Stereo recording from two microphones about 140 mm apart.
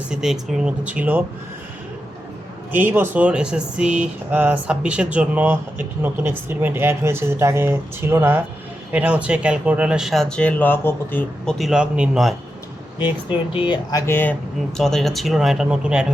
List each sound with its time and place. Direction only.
0.1 s speech: 5° right (ahead or behind)
2.7 s speech: 15° right (ahead or behind); by 11.5 s 15° left (ahead or behind)
11.5 s speech: centre (ahead or behind)
13.0 s speech: 40° left (ahead or behind)
13.9 s speech: 15° left (ahead or behind)
14.8 s speech: 5° left (ahead or behind)